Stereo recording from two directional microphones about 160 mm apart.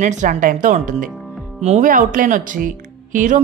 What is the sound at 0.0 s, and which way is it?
A woman's voice, 50° right (ahead or behind).